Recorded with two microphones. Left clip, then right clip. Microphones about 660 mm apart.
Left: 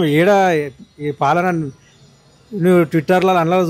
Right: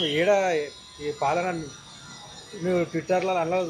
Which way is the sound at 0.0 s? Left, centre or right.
Left.